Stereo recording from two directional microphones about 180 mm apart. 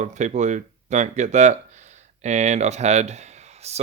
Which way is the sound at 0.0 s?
40° right (ahead or behind).